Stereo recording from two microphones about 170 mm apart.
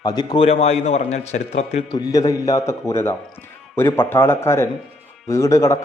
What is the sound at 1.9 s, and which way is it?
A man's voice, 20° left (ahead or behind).